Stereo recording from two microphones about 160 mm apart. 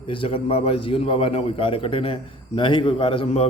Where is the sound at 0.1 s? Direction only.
30° left (ahead or behind).